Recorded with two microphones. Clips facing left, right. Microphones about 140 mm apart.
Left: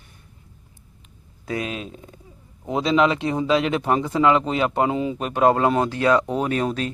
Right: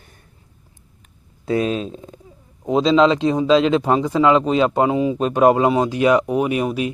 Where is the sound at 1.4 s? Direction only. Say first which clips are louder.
Right 8 dB; 30° right (ahead or behind).